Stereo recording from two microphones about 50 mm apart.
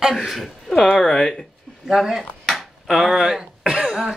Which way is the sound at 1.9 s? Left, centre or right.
Centre.